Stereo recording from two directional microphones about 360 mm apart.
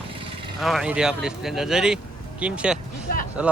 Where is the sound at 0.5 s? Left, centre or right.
Centre.